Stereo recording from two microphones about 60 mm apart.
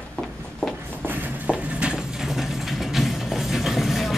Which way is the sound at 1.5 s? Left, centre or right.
Right.